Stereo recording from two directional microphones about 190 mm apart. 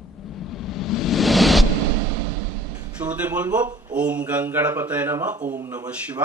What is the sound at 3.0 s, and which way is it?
Speech, 5° right (ahead or behind).